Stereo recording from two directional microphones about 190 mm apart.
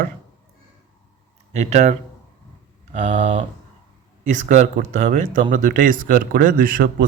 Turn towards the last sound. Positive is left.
turn(degrees=-50)  # may be behind; listen again after turning